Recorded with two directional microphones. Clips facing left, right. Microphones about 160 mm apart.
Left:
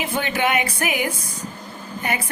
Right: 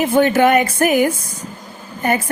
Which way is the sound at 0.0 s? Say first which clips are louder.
Right 10 dB; 45° right (ahead or behind).